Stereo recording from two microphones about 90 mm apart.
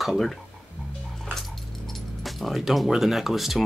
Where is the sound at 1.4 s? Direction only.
Centre (ahead or behind).